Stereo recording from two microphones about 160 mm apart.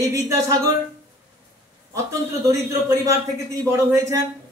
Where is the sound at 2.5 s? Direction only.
20° right (ahead or behind).